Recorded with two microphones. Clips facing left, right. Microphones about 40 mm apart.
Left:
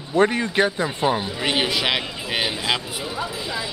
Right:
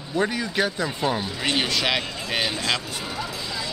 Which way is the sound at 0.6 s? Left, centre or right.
Left.